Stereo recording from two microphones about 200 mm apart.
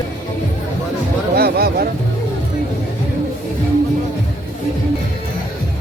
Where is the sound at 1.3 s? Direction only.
50° right (ahead or behind).